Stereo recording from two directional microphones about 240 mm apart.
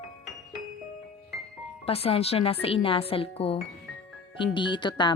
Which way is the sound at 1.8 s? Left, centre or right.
Left.